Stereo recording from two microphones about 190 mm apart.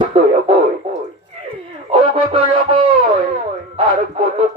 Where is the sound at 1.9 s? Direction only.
30° right (ahead or behind).